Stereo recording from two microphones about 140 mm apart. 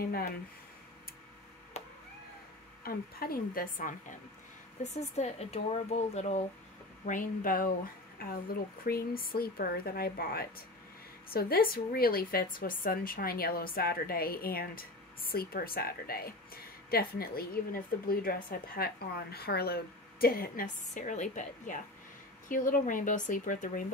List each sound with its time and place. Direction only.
1.8 s chop: 50° left (ahead or behind)
2.8 s a woman's voice: 90° left
4.9 s a woman's voice: 50° left (ahead or behind)
7.1 s a woman's voice: 75° left (ahead or behind)